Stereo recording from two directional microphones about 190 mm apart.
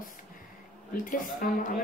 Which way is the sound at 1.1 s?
45° left (ahead or behind).